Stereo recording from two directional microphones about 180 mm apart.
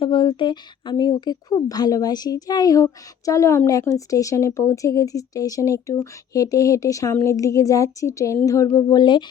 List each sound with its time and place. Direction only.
0.0 s speech: 25° left (ahead or behind)